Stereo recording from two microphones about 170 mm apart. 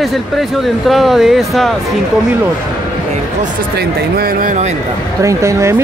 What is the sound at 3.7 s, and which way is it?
Speech, 65° right (ahead or behind).